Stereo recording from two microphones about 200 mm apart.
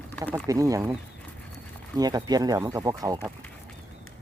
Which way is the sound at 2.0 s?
20° right (ahead or behind).